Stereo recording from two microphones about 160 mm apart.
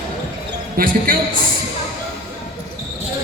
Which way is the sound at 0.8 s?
60° right (ahead or behind).